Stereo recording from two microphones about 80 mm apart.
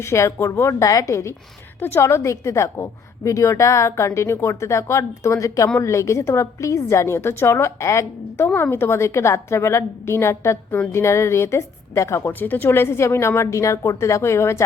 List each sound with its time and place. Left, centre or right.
0.0 s a woman's voice: left
12.3 s a woman's voice: left